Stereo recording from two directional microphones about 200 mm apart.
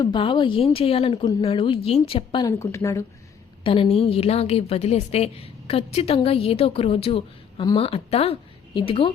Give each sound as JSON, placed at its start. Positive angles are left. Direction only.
{"t": 0.0, "sound": "a woman's voice", "side_deg": 25}
{"t": 3.6, "sound": "a woman's voice", "side_deg": 25}